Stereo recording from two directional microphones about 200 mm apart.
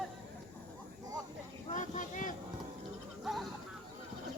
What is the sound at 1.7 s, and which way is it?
Vehicle, 40° left (ahead or behind).